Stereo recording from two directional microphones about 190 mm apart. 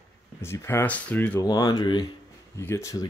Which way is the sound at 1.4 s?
20° left (ahead or behind).